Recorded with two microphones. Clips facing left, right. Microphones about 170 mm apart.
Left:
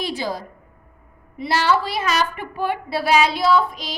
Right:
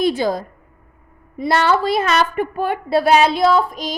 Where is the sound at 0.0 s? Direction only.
50° right (ahead or behind).